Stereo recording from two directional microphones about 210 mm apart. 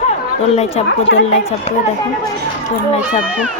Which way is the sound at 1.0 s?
65° left (ahead or behind).